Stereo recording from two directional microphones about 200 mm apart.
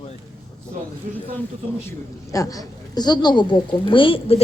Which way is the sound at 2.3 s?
15° left (ahead or behind).